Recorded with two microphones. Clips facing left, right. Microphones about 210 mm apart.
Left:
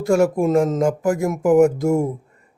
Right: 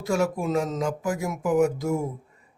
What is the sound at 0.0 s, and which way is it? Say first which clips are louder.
Speech: left 8 dB; 50° left (ahead or behind).